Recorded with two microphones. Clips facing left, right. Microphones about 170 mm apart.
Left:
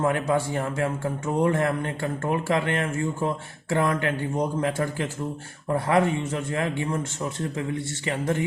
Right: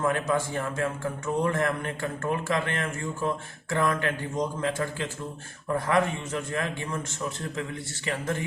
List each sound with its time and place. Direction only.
0.0 s speech: 25° left (ahead or behind)
8.0 s speech: 20° left (ahead or behind)